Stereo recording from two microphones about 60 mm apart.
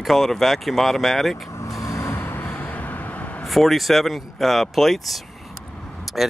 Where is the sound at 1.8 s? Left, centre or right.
Left.